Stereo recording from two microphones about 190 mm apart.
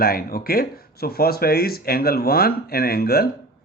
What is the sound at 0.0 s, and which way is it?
Speech, 50° left (ahead or behind).